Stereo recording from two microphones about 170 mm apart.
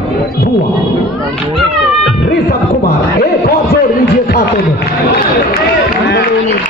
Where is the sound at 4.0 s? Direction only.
75° left (ahead or behind).